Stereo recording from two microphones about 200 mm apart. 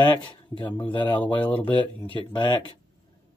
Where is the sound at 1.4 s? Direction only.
10° left (ahead or behind).